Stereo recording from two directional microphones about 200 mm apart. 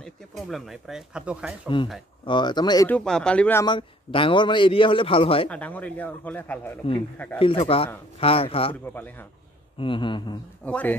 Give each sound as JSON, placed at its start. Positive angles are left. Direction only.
{"t": 0.5, "sound": "speech", "side_deg": 0}
{"t": 2.2, "sound": "a man's voice", "side_deg": 20}
{"t": 2.9, "sound": "speech", "side_deg": 5}
{"t": 3.6, "sound": "a man's voice", "side_deg": 25}
{"t": 5.5, "sound": "speech", "side_deg": 5}
{"t": 7.3, "sound": "a man's voice", "side_deg": 25}
{"t": 8.9, "sound": "speech", "side_deg": 10}
{"t": 9.8, "sound": "a man's voice", "side_deg": 25}
{"t": 10.6, "sound": "speech", "side_deg": 5}